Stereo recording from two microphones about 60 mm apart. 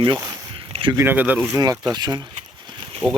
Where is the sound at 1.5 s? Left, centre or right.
Right.